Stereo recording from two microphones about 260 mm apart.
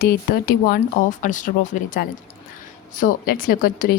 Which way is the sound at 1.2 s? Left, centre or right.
Left.